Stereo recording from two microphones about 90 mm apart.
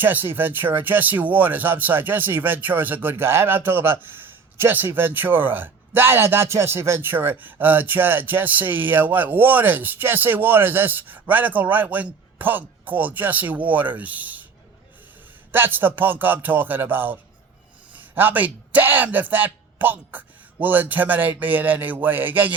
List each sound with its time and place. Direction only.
0.0 s speech: 20° right (ahead or behind)
15.5 s a man's voice: 20° right (ahead or behind)